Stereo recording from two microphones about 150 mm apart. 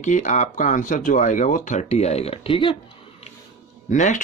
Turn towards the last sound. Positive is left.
turn(degrees=55)  # may be behind; listen again after turning